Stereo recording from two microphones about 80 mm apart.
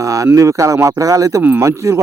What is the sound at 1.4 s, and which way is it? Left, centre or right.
Speech, right.